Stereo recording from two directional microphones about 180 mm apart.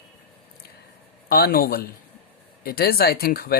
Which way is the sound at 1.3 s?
55° left (ahead or behind).